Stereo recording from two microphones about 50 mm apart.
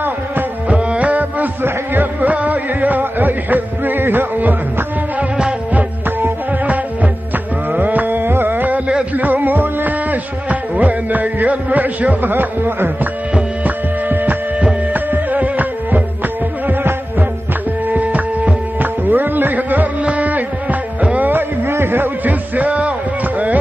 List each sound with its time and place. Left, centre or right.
0.7 s music: right
5.7 s music: right
7.7 s carnatic music: right
9.1 s music: right
13.3 s hum: right
14.9 s music: right
17.8 s music: right
21.3 s music: right